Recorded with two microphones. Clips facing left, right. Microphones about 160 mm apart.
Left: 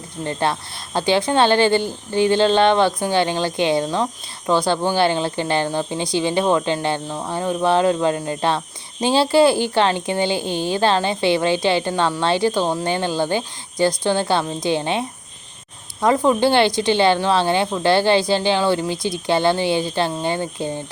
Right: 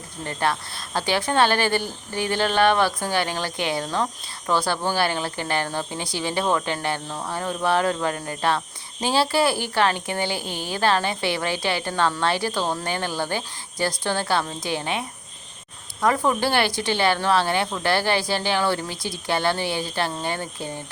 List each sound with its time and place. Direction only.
0.3 s a woman's voice: 25° left (ahead or behind)